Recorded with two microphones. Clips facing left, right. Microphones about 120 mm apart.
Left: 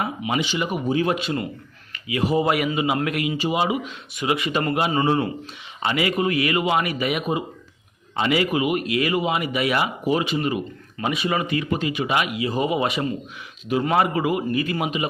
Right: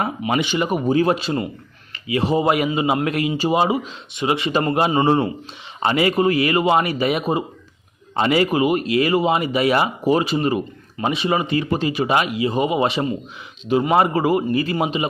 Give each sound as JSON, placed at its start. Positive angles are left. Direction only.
{"t": 0.0, "sound": "a man's voice", "side_deg": -50}